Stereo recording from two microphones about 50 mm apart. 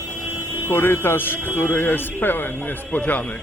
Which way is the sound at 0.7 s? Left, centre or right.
Left.